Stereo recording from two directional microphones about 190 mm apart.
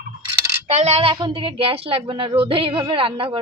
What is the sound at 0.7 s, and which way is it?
A woman's voice, 35° right (ahead or behind).